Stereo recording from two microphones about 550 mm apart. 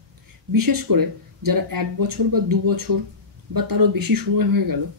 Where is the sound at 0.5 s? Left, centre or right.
Right.